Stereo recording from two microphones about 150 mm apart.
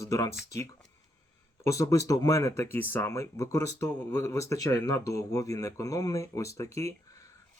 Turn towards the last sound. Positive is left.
turn(degrees=20)  # may be behind; listen again after turning